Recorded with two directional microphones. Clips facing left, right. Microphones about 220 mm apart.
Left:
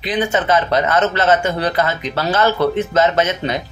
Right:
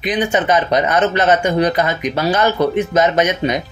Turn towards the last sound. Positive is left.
turn(degrees=-15)  # may be behind; listen again after turning